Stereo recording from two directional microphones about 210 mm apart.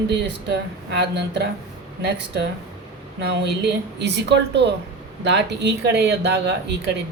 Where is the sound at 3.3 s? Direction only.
55° right (ahead or behind).